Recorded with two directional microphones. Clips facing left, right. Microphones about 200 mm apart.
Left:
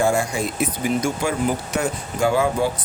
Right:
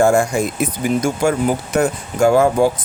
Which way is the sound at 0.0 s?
50° right (ahead or behind).